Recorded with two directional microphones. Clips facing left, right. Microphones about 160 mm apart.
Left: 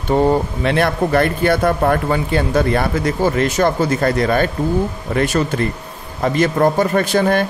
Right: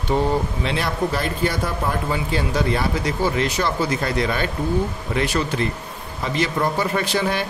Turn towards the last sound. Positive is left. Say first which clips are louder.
# left 7 dB
turn(degrees=50)  # may be behind; listen again after turning